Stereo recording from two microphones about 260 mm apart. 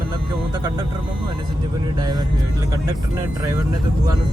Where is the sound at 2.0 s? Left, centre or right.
Centre.